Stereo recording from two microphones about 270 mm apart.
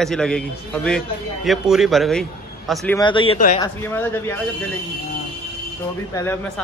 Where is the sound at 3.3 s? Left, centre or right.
Left.